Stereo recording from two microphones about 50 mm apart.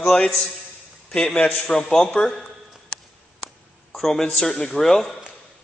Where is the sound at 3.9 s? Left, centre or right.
Centre.